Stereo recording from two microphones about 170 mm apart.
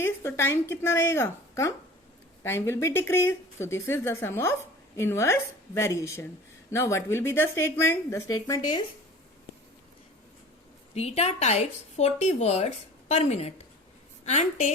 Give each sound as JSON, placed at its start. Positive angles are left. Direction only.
{"t": 0.0, "sound": "a woman's voice", "side_deg": 15}
{"t": 10.9, "sound": "speech", "side_deg": 40}